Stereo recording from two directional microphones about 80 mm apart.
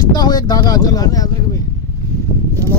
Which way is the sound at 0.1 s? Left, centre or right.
Left.